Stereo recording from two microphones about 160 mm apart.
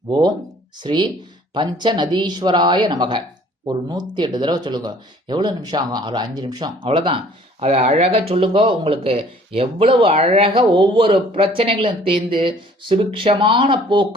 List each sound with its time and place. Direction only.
0.1 s speech: 25° right (ahead or behind)